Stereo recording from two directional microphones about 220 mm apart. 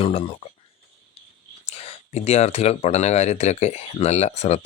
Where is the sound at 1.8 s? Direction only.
30° left (ahead or behind).